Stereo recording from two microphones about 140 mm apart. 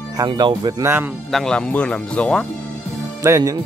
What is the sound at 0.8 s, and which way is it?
Speech, 15° right (ahead or behind).